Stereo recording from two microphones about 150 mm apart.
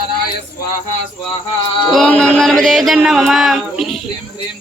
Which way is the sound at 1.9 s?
5° left (ahead or behind).